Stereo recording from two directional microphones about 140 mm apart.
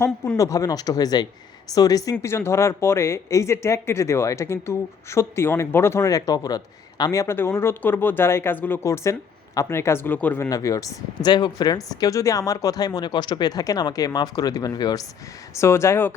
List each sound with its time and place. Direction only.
0.3 s speech: 25° left (ahead or behind)
10.5 s speech: 25° left (ahead or behind)